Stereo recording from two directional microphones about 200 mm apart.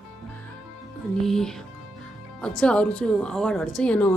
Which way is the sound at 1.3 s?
Centre (ahead or behind).